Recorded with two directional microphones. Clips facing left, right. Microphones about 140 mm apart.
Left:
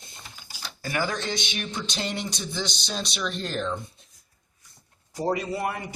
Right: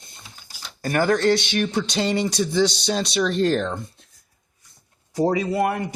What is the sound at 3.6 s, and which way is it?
Speech, 60° right (ahead or behind).